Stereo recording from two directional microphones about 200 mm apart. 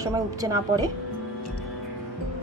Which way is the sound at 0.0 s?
15° right (ahead or behind).